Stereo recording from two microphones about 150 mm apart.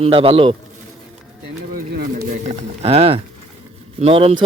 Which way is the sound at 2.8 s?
40° right (ahead or behind).